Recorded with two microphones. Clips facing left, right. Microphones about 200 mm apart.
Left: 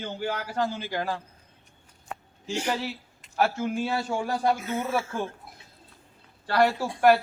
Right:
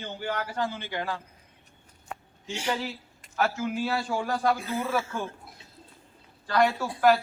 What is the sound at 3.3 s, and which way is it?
A man's voice, 30° left (ahead or behind).